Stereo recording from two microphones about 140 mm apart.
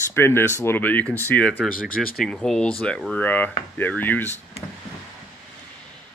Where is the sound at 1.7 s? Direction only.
90° left.